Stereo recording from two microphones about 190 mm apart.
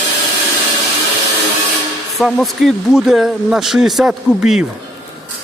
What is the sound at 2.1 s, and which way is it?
Speech, centre (ahead or behind).